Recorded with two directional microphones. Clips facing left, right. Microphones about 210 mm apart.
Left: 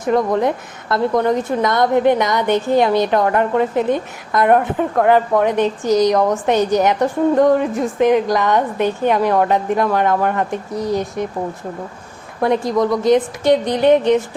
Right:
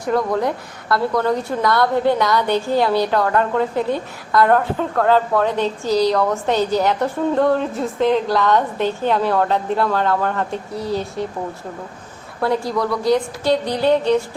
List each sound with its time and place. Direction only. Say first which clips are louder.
0.0 s a woman's voice: left 3 dB; 20° left (ahead or behind)
12.4 s a woman's voice: left 4 dB; 20° left (ahead or behind)